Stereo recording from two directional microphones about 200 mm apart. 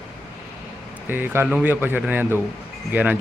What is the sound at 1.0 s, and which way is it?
A man's voice, 10° right (ahead or behind).